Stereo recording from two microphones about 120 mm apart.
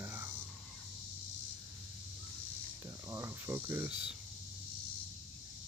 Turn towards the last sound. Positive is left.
turn(degrees=-20)  # may be behind; listen again after turning